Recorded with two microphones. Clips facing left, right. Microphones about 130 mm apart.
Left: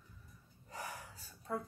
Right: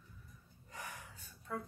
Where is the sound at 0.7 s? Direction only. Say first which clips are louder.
Left 3 dB; 35° left (ahead or behind).